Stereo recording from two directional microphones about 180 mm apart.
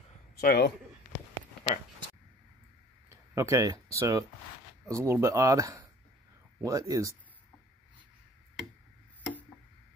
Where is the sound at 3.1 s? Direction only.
15° right (ahead or behind).